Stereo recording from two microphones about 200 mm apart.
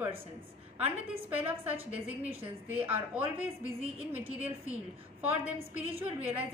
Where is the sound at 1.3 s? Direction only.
10° right (ahead or behind).